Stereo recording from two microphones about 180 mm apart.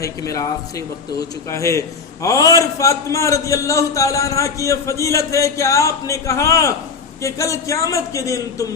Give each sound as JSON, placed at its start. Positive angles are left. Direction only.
{"t": 0.0, "sound": "a man's voice", "side_deg": 20}
{"t": 1.5, "sound": "a man's voice", "side_deg": 15}